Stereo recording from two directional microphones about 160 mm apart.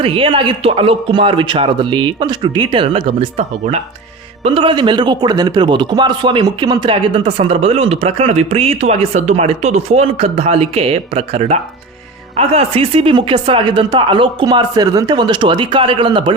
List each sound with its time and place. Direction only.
0.0 s speech: 35° right (ahead or behind)